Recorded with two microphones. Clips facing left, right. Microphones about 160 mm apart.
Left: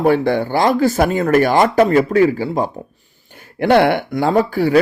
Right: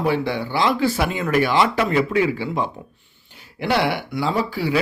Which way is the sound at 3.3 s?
50° left (ahead or behind).